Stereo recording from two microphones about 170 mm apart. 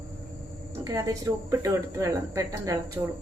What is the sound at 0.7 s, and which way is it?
Speech, 15° right (ahead or behind).